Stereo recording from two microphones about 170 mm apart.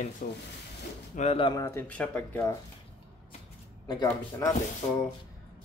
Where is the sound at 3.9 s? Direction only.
20° left (ahead or behind).